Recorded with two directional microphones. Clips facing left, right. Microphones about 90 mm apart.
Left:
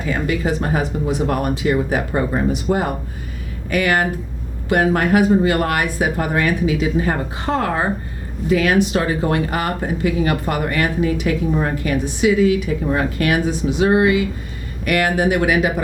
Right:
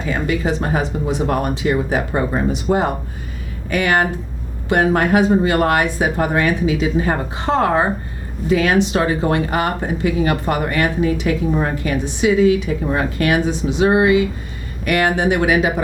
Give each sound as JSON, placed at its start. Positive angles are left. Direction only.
{"t": 0.0, "sound": "speech", "side_deg": -25}